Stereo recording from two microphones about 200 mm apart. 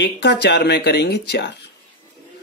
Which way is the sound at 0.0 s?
55° left (ahead or behind).